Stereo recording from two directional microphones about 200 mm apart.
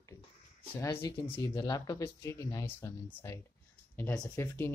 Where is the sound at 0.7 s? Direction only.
15° left (ahead or behind).